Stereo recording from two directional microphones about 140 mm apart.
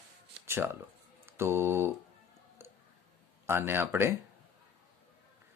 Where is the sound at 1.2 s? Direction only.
20° right (ahead or behind).